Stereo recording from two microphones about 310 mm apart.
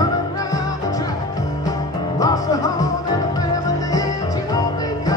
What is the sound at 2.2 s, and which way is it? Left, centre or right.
Music, centre.